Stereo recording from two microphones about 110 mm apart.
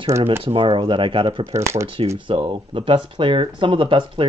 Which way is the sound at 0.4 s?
50° right (ahead or behind).